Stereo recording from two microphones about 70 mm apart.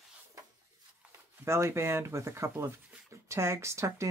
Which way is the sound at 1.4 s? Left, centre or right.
Right.